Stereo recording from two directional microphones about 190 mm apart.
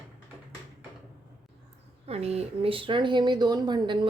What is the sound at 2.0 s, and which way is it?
Speech, 35° right (ahead or behind).